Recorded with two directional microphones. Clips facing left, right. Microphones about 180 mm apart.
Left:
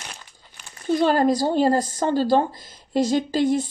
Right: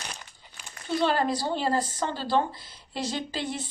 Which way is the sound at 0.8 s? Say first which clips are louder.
Left 7 dB; 45° left (ahead or behind).